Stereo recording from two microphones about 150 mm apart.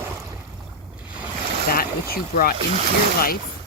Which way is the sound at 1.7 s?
80° left.